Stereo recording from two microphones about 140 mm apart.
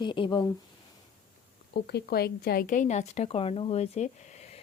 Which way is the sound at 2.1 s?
90° left.